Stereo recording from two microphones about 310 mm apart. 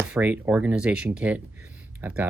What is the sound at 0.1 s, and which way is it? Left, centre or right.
Speech, centre.